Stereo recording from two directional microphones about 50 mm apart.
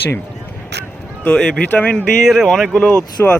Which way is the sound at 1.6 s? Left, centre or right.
Left.